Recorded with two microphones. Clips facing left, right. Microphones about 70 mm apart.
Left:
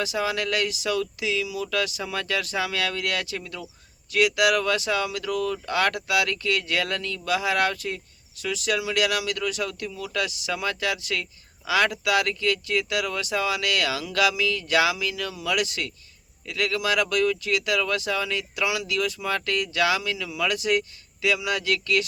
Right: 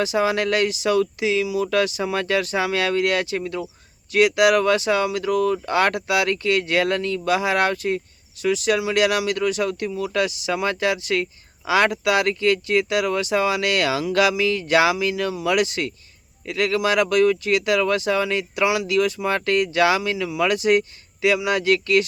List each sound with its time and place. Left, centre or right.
0.0 s speech: right